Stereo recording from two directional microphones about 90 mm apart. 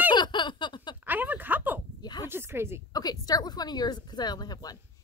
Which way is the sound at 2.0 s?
50° left (ahead or behind).